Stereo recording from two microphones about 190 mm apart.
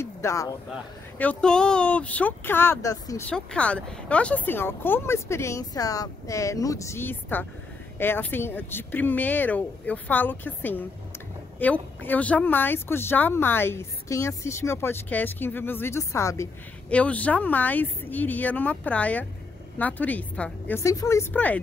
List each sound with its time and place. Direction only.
0.0 s speech: 15° left (ahead or behind)
3.3 s speech: 5° left (ahead or behind)